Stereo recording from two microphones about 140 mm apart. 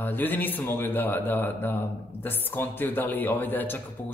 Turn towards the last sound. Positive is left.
turn(degrees=15)  # may be behind; listen again after turning